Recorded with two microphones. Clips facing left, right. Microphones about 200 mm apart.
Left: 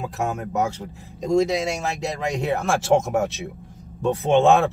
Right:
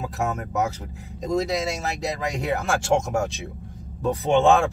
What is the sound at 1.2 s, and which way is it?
Speech, centre (ahead or behind).